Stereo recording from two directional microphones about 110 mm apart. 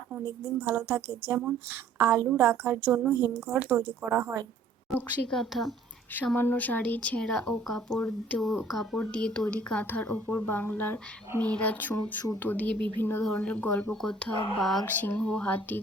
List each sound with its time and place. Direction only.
0.3 s a woman's voice: 20° right (ahead or behind)
5.3 s speech: centre (ahead or behind)
6.3 s speech: 20° left (ahead or behind); by 14.8 s centre (ahead or behind)
14.8 s speech: 15° left (ahead or behind)